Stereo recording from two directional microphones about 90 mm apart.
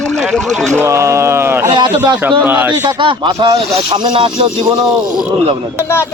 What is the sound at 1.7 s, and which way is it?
Speech, 50° right (ahead or behind).